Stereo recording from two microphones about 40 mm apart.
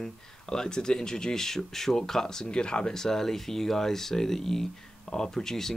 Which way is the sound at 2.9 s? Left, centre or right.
Centre.